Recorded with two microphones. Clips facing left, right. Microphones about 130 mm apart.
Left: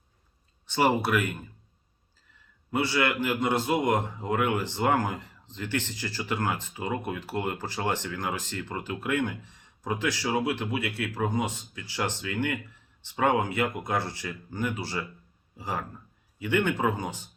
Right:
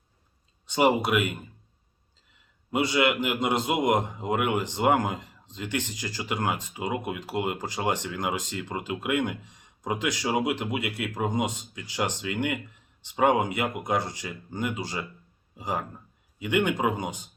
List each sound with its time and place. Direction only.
0.7 s a man's voice: 15° right (ahead or behind)
2.7 s a man's voice: 15° right (ahead or behind)